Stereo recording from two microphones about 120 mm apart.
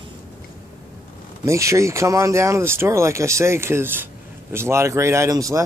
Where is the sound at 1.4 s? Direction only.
25° right (ahead or behind).